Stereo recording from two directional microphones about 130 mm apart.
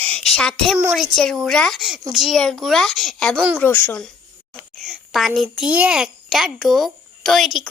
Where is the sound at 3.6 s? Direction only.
15° left (ahead or behind).